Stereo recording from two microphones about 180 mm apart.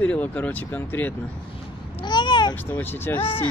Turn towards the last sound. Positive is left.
turn(degrees=10)  # may be behind; listen again after turning